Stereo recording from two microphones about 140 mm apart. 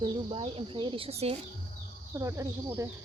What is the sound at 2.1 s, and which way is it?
Speech, 20° right (ahead or behind).